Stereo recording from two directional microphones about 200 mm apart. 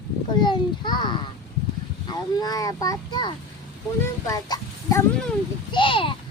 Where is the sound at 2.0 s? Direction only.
20° left (ahead or behind).